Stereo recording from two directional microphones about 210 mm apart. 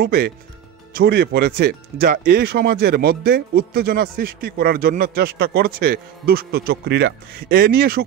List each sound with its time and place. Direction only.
0.0 s speech: 50° right (ahead or behind)